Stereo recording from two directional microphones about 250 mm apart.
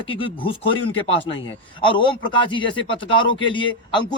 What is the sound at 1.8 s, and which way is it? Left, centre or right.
Speech, centre.